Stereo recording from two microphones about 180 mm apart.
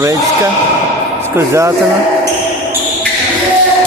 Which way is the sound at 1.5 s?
15° right (ahead or behind).